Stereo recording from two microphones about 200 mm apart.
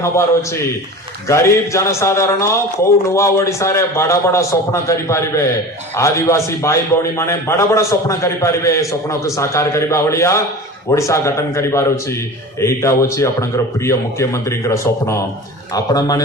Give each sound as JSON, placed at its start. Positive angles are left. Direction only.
{"t": 1.3, "sound": "a man's voice", "side_deg": 15}